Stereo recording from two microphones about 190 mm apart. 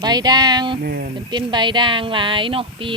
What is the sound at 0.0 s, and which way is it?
Speech, 20° right (ahead or behind).